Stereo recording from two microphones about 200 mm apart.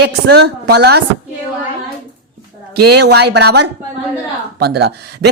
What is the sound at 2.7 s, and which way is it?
A woman's voice, 55° right (ahead or behind).